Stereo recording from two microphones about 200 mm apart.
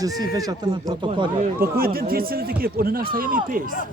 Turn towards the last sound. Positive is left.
turn(degrees=-45)  # may be behind; listen again after turning